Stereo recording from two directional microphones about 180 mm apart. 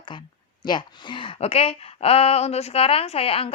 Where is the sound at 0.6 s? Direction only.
25° left (ahead or behind).